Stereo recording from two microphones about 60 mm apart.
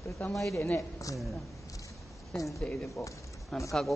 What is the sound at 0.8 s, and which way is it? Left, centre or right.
Speech, left.